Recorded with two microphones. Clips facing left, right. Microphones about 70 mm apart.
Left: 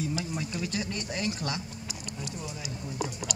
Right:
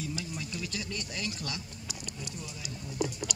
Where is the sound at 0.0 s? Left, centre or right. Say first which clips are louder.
Left 5 dB; left.